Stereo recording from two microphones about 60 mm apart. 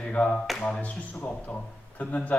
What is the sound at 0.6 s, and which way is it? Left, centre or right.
Speech, left.